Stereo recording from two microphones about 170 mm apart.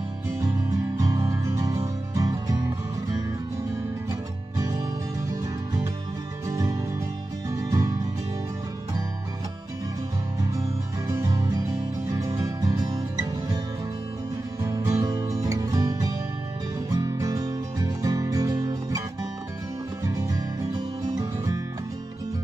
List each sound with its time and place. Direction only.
0.9 s music: 20° right (ahead or behind)
6.4 s music: 20° right (ahead or behind)
11.1 s music: 20° right (ahead or behind)
14.6 s music: 20° right (ahead or behind)